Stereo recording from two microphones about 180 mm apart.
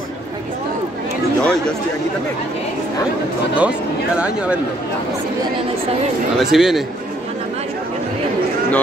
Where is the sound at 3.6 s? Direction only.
5° right (ahead or behind).